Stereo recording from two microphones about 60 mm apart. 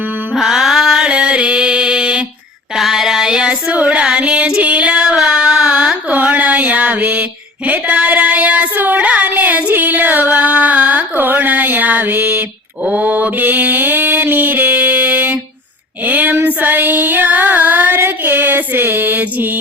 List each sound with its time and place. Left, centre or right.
0.3 s music: centre
1.1 s mantra: centre
2.7 s a sound: centre
3.5 s female singing: right
6.1 s music: right
12.8 s mantra: right
16.0 s female singing: right